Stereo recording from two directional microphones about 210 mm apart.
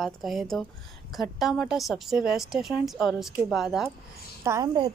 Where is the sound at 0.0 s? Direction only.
Centre (ahead or behind).